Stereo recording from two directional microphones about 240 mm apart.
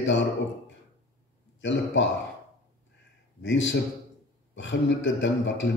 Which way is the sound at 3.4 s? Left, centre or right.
Left.